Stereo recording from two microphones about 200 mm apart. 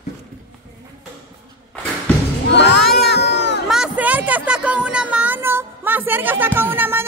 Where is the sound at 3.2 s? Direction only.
60° left (ahead or behind).